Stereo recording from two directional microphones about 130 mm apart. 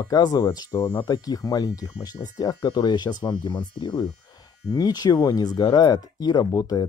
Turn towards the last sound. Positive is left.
turn(degrees=30)  # may be behind; listen again after turning